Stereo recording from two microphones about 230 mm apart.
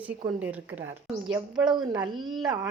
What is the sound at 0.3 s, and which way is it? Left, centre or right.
A woman's voice, centre.